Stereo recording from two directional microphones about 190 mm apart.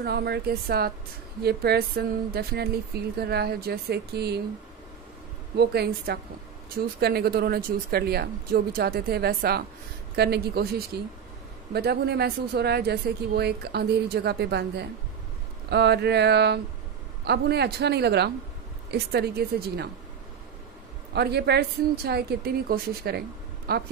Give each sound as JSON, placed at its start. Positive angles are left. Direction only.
{"t": 0.0, "sound": "speech", "side_deg": -60}
{"t": 5.6, "sound": "speech", "side_deg": -60}
{"t": 21.1, "sound": "speech", "side_deg": -60}